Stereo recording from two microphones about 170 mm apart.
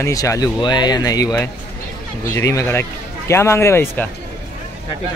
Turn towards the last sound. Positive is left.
turn(degrees=15)  # may be behind; listen again after turning